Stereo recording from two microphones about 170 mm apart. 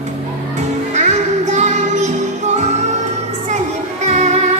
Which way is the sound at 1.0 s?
40° right (ahead or behind).